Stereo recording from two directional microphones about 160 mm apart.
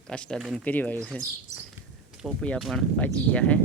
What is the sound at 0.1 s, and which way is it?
Speech, 5° left (ahead or behind).